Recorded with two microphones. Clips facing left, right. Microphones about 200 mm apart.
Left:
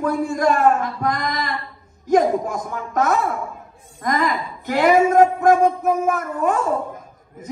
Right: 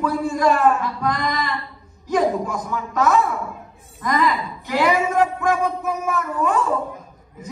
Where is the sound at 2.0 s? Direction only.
45° left (ahead or behind).